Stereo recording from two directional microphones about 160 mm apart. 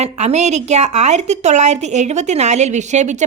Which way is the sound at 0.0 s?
45° right (ahead or behind).